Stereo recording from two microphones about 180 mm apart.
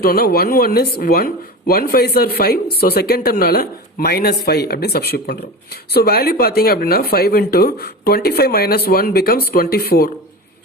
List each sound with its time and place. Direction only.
0.0 s speech: 55° left (ahead or behind)